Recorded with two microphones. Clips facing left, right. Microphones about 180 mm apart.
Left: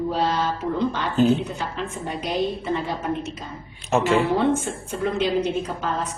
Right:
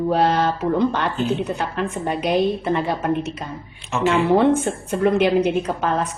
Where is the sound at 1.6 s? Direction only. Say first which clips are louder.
Right 5 dB; 65° right (ahead or behind).